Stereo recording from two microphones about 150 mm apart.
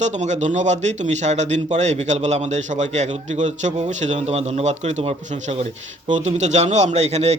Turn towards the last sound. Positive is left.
turn(degrees=-45)  # may be behind; listen again after turning